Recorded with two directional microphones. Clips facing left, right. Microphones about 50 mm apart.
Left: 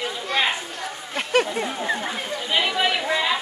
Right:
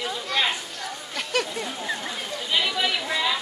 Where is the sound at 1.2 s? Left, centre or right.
Left.